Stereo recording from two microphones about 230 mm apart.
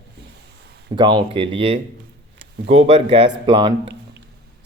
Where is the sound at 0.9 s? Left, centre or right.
Centre.